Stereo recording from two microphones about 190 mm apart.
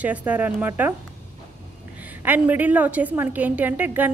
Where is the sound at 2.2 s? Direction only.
10° right (ahead or behind).